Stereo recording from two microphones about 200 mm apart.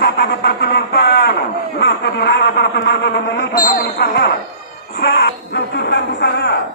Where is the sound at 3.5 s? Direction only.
45° left (ahead or behind).